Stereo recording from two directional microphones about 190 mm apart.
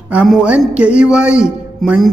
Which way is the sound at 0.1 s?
5° right (ahead or behind).